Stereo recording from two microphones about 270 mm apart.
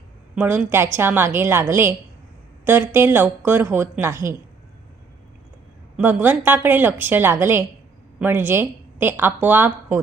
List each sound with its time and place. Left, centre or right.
0.3 s a woman's voice: centre
6.0 s a woman's voice: centre